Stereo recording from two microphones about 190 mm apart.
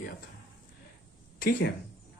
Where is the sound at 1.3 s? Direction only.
50° left (ahead or behind).